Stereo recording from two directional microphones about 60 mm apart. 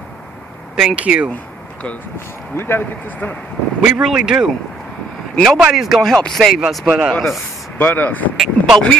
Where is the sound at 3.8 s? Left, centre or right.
Centre.